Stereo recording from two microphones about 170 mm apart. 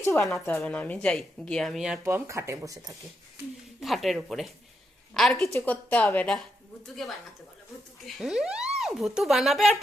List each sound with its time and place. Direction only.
0.0 s a woman's voice: 15° left (ahead or behind); by 2.0 s centre (ahead or behind)
2.0 s speech: 15° right (ahead or behind)
3.8 s speech: centre (ahead or behind)